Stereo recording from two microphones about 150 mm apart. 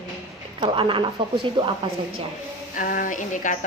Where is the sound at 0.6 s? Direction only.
35° right (ahead or behind).